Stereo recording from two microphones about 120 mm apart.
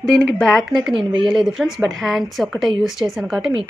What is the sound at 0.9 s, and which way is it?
Speech, 40° right (ahead or behind).